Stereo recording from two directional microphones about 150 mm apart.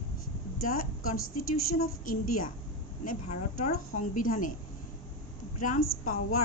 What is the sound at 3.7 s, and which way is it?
Speech, 65° left (ahead or behind).